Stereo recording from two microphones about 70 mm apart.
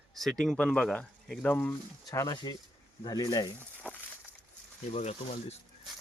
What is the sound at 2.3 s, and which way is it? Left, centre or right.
Speech, left.